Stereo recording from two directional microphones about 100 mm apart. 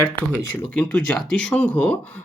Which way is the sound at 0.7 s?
10° left (ahead or behind).